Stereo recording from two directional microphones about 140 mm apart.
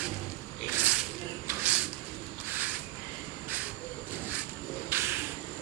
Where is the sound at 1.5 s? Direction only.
10° right (ahead or behind).